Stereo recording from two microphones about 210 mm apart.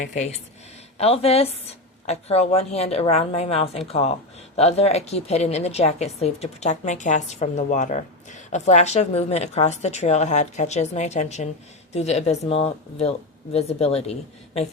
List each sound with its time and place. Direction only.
0.0 s a woman's voice: 35° left (ahead or behind)